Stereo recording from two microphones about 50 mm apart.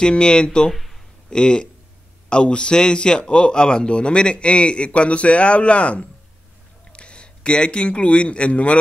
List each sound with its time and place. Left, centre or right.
0.0 s a man's voice: centre